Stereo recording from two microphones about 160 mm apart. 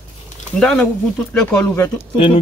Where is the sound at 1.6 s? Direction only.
20° left (ahead or behind).